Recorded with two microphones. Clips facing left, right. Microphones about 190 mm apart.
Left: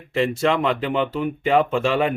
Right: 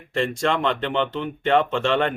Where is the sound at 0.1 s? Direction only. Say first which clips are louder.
Left 3 dB; 5° left (ahead or behind).